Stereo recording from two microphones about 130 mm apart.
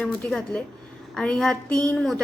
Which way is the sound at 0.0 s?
10° left (ahead or behind).